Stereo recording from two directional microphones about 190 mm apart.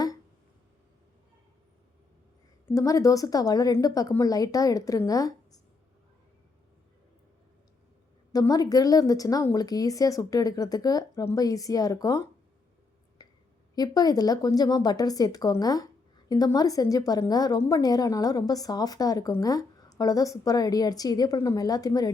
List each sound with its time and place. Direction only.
2.6 s a woman's voice: 15° left (ahead or behind)
8.3 s a woman's voice: 20° left (ahead or behind)
13.2 s a sound: 20° left (ahead or behind)
13.7 s a woman's voice: 20° left (ahead or behind)